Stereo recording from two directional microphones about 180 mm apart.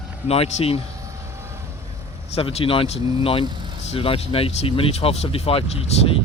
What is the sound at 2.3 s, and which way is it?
Speech, 35° left (ahead or behind).